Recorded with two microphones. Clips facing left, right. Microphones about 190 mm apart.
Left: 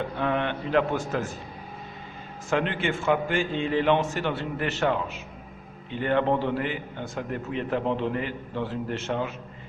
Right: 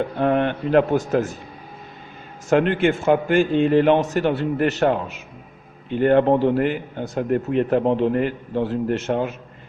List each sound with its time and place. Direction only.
0.2 s a man's voice: 45° right (ahead or behind)
2.5 s a man's voice: 45° right (ahead or behind)